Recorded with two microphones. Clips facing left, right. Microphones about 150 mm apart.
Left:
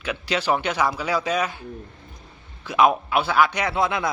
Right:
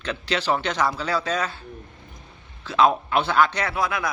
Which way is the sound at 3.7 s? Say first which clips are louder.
Left 3 dB; 25° left (ahead or behind).